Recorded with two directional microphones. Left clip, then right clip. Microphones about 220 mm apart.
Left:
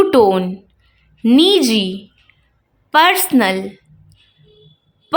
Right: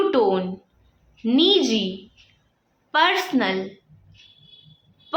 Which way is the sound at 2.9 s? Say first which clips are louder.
Left 7 dB; 55° left (ahead or behind).